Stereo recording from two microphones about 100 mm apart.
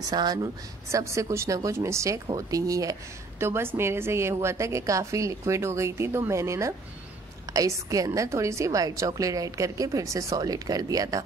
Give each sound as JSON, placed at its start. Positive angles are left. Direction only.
{"t": 0.0, "sound": "speech", "side_deg": -45}
{"t": 0.9, "sound": "a woman's voice", "side_deg": -30}